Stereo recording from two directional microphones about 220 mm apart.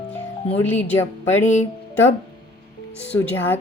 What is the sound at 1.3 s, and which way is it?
Music, 30° left (ahead or behind).